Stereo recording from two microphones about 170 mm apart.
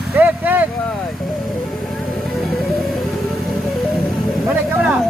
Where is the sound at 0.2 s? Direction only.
10° right (ahead or behind).